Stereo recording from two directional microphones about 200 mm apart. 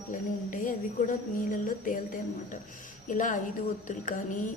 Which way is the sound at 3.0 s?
40° left (ahead or behind).